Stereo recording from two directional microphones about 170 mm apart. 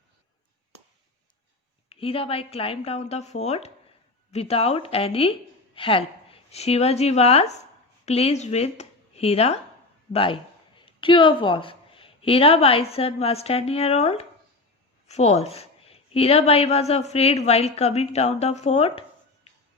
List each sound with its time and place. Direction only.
1.9 s a woman's voice: 35° left (ahead or behind)